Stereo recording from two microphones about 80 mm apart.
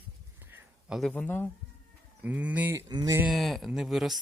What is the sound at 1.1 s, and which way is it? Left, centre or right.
Speech, left.